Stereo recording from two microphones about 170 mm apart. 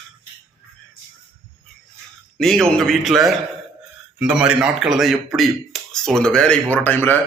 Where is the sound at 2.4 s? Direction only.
Centre (ahead or behind).